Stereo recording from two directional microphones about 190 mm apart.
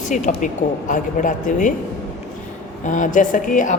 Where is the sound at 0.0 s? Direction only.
40° left (ahead or behind).